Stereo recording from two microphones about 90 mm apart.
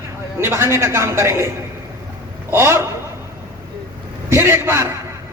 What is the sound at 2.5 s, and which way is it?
Speech, 30° right (ahead or behind).